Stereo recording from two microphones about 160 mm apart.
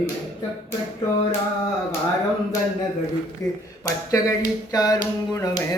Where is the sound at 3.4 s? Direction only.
20° left (ahead or behind).